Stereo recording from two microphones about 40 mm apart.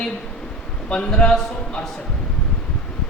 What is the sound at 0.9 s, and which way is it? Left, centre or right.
Speech, left.